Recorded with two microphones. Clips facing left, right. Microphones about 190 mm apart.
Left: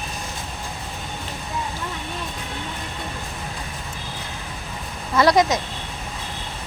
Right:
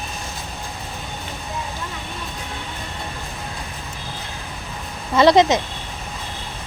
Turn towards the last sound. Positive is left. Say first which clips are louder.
# right 4 dB
turn(degrees=-25)  # may be behind; listen again after turning